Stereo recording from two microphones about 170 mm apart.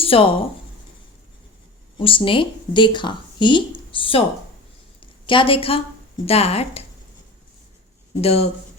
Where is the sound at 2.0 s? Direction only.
30° left (ahead or behind).